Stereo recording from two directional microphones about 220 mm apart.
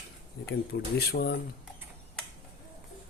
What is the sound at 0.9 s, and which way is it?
Speech, 45° left (ahead or behind).